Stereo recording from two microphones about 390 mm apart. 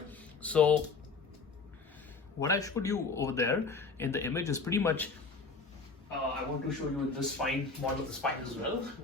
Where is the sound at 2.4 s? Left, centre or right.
Centre.